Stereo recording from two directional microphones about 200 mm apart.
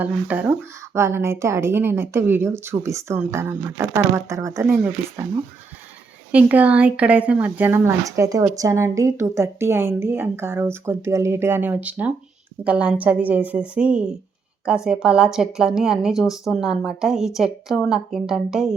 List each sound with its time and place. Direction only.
0.0 s a woman's voice: 5° right (ahead or behind)
6.3 s a woman's voice: 5° right (ahead or behind)